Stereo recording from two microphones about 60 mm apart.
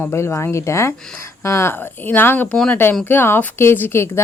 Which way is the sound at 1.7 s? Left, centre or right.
Left.